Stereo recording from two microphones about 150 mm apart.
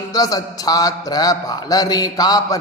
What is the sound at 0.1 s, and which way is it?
Speech, 25° left (ahead or behind).